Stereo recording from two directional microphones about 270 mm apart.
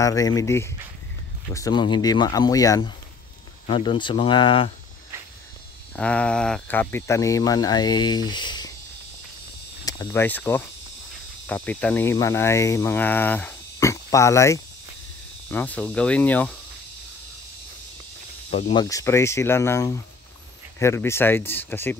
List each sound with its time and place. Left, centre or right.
0.0 s speech: centre
5.9 s speech: centre
9.8 s speech: centre
18.5 s speech: left